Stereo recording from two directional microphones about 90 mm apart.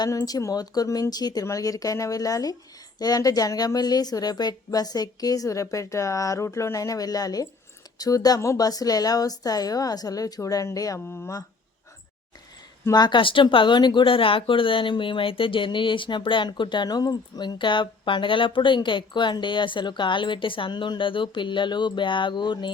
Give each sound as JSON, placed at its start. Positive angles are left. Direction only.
{"t": 0.0, "sound": "a woman's voice", "side_deg": 45}
{"t": 11.1, "sound": "speech", "side_deg": 25}
{"t": 12.9, "sound": "speech", "side_deg": 55}